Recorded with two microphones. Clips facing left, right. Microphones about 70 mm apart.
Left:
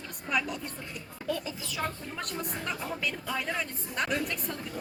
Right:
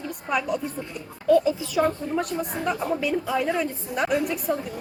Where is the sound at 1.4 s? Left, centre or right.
Centre.